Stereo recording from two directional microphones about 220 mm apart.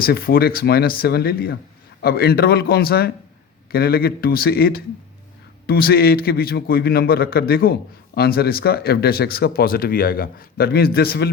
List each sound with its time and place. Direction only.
0.0 s a man's voice: 45° left (ahead or behind)